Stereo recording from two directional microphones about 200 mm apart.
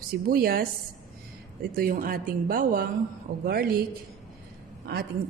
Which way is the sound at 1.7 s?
45° right (ahead or behind).